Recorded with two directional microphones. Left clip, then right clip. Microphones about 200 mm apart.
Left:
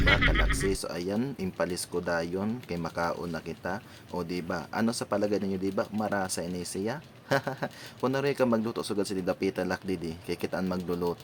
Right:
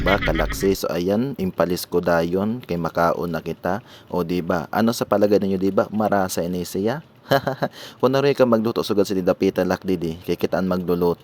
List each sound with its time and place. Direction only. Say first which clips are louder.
0.0 s speech: right 4 dB; centre (ahead or behind)
0.6 s speech: right 10 dB; 40° right (ahead or behind)